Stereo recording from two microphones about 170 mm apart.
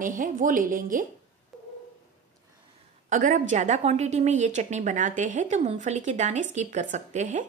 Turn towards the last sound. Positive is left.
turn(degrees=-45)  # may be behind; listen again after turning